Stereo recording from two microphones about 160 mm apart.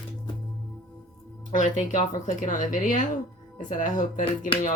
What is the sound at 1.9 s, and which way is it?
Speech, 50° left (ahead or behind).